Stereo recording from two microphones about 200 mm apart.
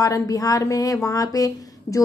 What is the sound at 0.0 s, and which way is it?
A woman's voice, 15° left (ahead or behind).